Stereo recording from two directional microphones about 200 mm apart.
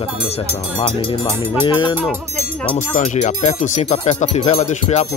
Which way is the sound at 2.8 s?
40° left (ahead or behind).